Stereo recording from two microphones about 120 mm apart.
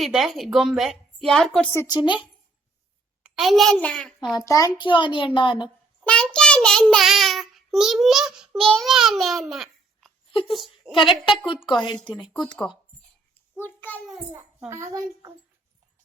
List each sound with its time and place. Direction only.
0.0 s speech: centre (ahead or behind)
1.9 s a woman's voice: 40° left (ahead or behind)
3.2 s a child's voice: 5° right (ahead or behind)
4.4 s a child's voice: 30° left (ahead or behind)
4.9 s a child's voice: 45° left (ahead or behind)
6.3 s child singing: 5° left (ahead or behind)
10.4 s speech: centre (ahead or behind)
10.9 s a child's voice: 45° left (ahead or behind)
12.6 s a child's voice: 10° left (ahead or behind)
14.7 s a child's voice: 25° right (ahead or behind)